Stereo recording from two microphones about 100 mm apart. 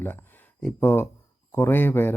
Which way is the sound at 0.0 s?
20° left (ahead or behind).